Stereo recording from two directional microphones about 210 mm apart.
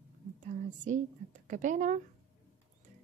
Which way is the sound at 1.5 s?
35° right (ahead or behind).